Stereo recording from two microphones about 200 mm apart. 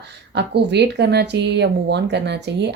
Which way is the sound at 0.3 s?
55° right (ahead or behind).